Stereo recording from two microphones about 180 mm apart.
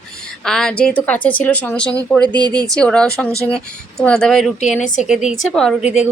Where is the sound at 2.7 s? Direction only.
5° left (ahead or behind).